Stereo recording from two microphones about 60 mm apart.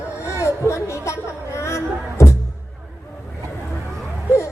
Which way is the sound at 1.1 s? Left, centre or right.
Left.